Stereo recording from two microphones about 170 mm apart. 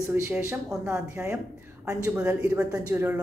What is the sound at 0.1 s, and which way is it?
A man's voice, 15° right (ahead or behind).